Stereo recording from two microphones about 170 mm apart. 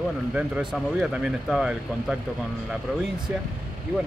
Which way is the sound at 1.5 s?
5° right (ahead or behind).